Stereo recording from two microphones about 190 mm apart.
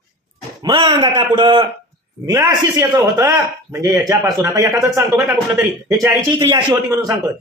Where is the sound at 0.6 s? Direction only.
25° right (ahead or behind); by 6.1 s 5° right (ahead or behind).